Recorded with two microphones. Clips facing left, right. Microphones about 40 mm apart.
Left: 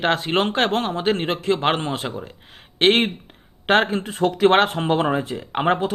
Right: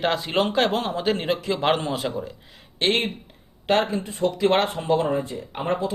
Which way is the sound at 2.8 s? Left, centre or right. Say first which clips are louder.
Left 5 dB; left.